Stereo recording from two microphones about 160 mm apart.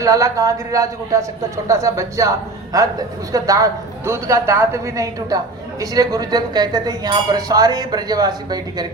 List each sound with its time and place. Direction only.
0.0 s speech: 20° right (ahead or behind)